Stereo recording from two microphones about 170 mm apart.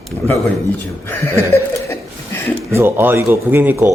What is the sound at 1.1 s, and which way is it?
Speech, 15° left (ahead or behind).